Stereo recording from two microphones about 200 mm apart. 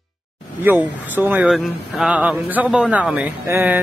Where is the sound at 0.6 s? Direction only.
10° right (ahead or behind).